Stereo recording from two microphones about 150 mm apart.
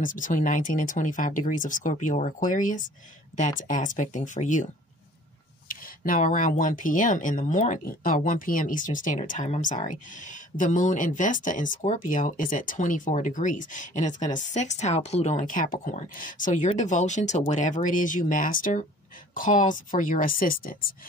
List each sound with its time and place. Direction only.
0.0 s speech: 60° left (ahead or behind)
5.7 s a sound: 65° left (ahead or behind)
6.6 s speech: 60° left (ahead or behind)